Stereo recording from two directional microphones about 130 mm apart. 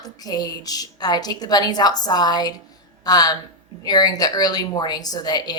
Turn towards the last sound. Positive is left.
turn(degrees=30)  # may be behind; listen again after turning